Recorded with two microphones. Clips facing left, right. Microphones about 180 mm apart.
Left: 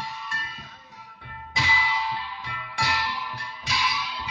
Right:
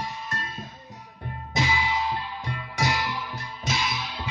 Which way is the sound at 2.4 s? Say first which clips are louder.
Right 5 dB; 45° right (ahead or behind).